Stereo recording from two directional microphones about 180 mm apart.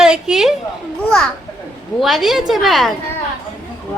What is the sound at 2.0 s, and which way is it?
Speech, centre (ahead or behind).